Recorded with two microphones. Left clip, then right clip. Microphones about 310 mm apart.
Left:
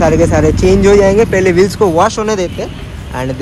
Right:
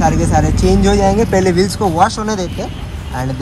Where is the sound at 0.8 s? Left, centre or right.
Centre.